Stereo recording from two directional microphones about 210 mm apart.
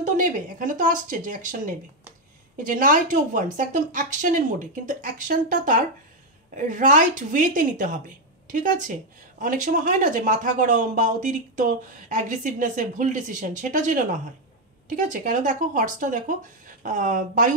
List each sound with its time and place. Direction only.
0.0 s speech: 40° right (ahead or behind)